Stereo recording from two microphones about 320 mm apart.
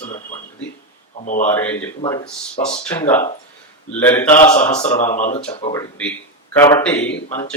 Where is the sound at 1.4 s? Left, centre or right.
Centre.